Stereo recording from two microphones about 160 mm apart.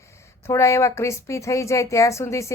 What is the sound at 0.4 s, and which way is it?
Speech, 20° left (ahead or behind).